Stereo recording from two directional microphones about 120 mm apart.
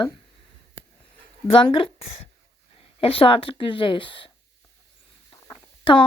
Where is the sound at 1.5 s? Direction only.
50° left (ahead or behind).